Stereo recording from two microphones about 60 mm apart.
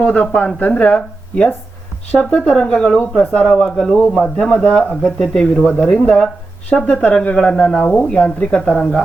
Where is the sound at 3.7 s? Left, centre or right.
Centre.